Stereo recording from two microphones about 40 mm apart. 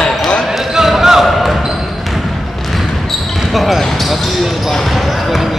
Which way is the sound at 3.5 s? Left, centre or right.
Centre.